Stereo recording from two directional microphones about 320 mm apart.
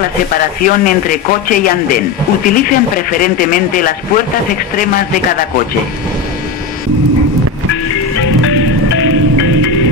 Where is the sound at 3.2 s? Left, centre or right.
Left.